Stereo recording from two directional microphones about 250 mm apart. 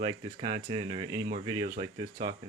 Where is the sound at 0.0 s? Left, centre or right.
Centre.